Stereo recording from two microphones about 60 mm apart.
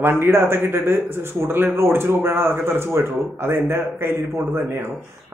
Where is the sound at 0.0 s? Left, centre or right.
Right.